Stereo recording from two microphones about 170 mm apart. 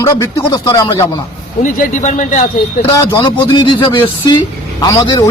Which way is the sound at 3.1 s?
30° left (ahead or behind).